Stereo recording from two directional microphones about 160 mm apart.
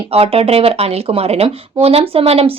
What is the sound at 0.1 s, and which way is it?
A woman's voice, 40° right (ahead or behind).